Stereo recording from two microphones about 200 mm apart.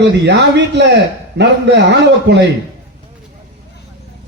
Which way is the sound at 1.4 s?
60° right (ahead or behind).